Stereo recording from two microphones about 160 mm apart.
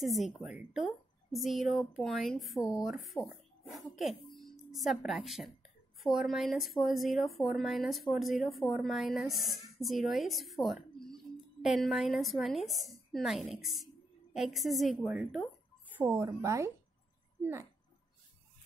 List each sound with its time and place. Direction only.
0.0 s a woman's voice: centre (ahead or behind); by 17.6 s 15° right (ahead or behind)